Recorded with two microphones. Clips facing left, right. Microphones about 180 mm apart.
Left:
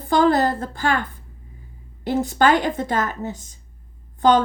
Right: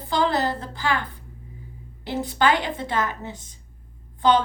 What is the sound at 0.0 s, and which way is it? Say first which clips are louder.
A woman's voice: left 6 dB; 50° left (ahead or behind).